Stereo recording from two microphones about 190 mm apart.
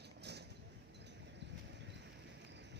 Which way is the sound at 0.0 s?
60° right (ahead or behind).